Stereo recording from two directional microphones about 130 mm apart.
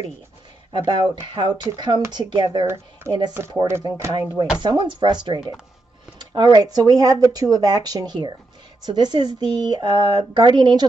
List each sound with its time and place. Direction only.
0.7 s speech: 35° right (ahead or behind)
2.6 s speech: 15° right (ahead or behind); by 10.9 s 35° right (ahead or behind)